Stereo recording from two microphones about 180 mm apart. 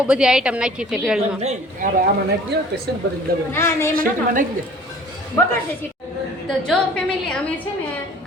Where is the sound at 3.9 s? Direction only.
50° right (ahead or behind).